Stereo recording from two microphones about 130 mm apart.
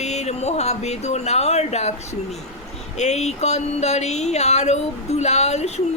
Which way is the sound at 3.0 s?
60° left (ahead or behind).